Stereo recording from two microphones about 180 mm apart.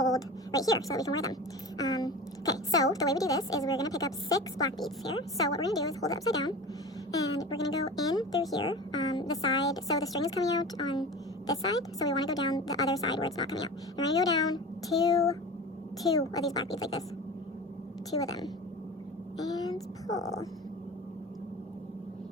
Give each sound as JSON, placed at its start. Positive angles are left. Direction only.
{"t": 0.0, "sound": "a woman's voice", "side_deg": 20}
{"t": 18.1, "sound": "speech", "side_deg": 20}
{"t": 19.4, "sound": "speech", "side_deg": 20}